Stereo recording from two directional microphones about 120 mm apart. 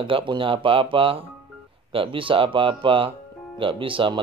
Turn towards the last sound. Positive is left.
turn(degrees=-45)  # may be behind; listen again after turning